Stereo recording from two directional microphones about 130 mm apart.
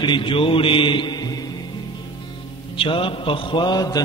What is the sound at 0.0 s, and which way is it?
Mantra, 40° left (ahead or behind).